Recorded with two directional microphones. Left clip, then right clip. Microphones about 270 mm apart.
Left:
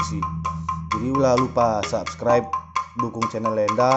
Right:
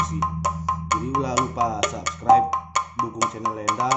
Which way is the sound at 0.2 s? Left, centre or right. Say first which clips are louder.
Right 3 dB; right.